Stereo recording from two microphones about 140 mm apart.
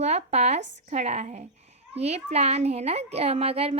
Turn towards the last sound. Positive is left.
turn(degrees=-45)  # may be behind; listen again after turning